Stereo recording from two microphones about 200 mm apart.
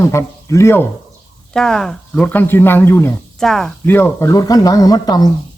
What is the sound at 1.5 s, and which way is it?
A woman's voice, 5° left (ahead or behind).